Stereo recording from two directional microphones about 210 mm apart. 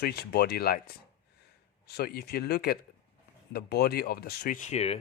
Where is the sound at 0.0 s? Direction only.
50° left (ahead or behind).